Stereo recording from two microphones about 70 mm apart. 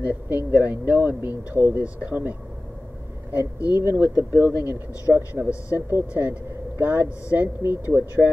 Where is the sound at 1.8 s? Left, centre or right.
Right.